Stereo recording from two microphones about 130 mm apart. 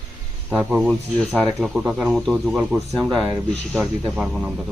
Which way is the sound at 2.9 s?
25° right (ahead or behind).